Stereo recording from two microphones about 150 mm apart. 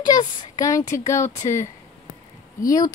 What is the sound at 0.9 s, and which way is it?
Speech, 20° left (ahead or behind).